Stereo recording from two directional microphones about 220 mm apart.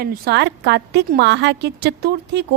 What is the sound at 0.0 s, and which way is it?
Speech, 45° right (ahead or behind).